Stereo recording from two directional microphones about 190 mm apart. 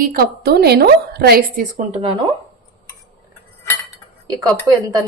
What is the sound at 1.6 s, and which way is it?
Speech, 35° right (ahead or behind).